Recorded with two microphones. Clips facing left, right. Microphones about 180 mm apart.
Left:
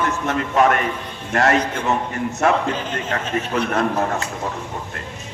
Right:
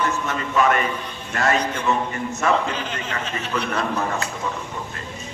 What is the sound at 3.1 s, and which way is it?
Speech, 50° left (ahead or behind).